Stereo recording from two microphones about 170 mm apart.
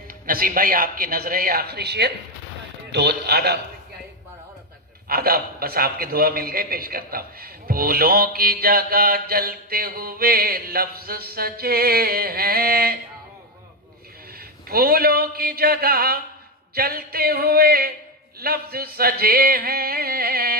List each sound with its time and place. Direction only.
0.3 s a man's voice: 60° right (ahead or behind)
5.0 s a man's voice: 60° right (ahead or behind)
14.7 s a man's voice: 60° right (ahead or behind)